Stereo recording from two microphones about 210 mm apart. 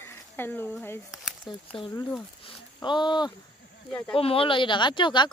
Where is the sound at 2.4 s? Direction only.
20° left (ahead or behind).